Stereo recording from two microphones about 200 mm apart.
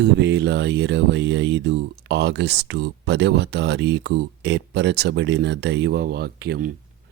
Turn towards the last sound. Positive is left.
turn(degrees=-50)  # may be behind; listen again after turning